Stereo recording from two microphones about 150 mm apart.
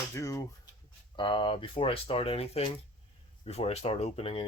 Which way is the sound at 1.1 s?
30° left (ahead or behind).